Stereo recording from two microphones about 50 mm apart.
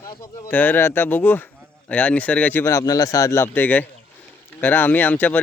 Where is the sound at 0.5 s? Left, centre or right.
Left.